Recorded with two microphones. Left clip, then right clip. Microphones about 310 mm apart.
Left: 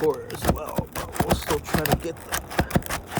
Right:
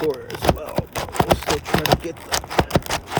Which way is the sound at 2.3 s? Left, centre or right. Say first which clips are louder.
Right 7 dB; right.